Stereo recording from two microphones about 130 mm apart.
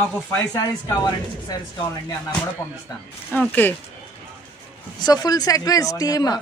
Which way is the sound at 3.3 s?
15° left (ahead or behind).